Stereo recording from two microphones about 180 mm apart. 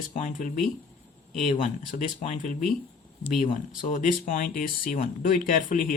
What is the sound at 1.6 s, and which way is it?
Speech, 45° left (ahead or behind).